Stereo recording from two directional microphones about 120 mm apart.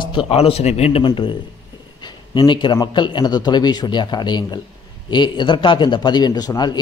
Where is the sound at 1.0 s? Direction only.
40° left (ahead or behind).